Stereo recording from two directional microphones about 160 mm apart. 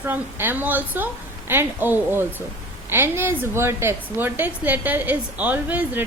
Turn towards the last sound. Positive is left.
turn(degrees=-10)  # may be behind; listen again after turning